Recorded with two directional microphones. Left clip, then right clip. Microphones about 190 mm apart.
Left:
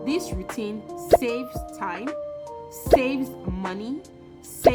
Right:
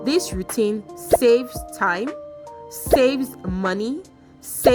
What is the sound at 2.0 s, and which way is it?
Music, centre (ahead or behind).